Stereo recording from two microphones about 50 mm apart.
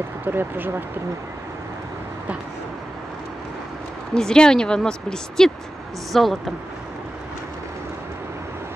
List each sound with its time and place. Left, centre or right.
0.2 s speech: right
4.1 s speech: centre
6.1 s speech: centre